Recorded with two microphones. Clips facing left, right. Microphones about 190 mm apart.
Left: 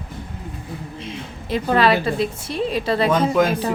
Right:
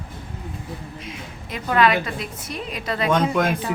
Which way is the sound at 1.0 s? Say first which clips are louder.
Left 4 dB; 30° left (ahead or behind).